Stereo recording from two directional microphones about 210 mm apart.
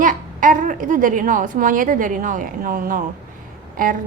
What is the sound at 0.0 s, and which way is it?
A woman's voice, 40° right (ahead or behind).